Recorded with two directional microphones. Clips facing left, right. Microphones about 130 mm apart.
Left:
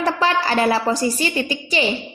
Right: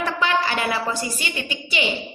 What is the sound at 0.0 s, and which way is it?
A woman's voice, 35° left (ahead or behind).